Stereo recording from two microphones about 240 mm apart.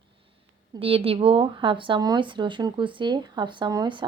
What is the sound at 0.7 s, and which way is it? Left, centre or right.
Speech, right.